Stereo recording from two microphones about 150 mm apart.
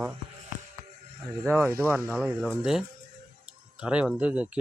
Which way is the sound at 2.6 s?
5° right (ahead or behind).